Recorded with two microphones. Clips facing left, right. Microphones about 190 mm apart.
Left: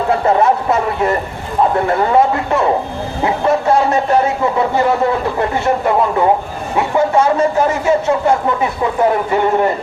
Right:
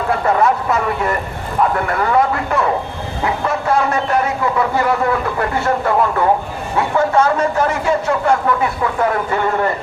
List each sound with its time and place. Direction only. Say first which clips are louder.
0.1 s a man's voice: left 2 dB; 25° left (ahead or behind)